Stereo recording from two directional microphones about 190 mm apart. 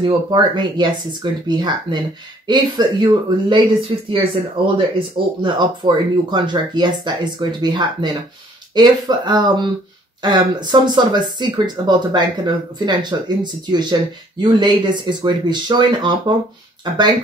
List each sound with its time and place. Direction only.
0.0 s speech: 25° right (ahead or behind)